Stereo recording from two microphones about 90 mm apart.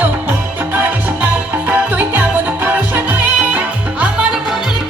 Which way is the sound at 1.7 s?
20° right (ahead or behind).